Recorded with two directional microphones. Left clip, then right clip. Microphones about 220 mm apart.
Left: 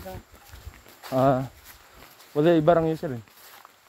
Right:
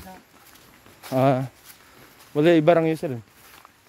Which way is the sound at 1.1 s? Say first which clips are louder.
Right 1 dB; 25° right (ahead or behind).